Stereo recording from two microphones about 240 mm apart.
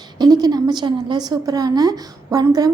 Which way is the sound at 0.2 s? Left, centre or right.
Centre.